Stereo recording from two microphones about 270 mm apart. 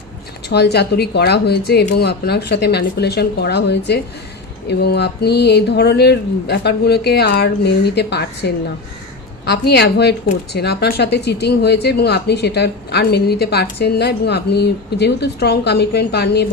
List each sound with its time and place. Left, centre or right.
0.5 s speech: left